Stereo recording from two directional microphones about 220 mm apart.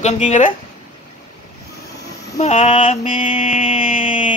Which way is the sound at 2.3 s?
30° left (ahead or behind).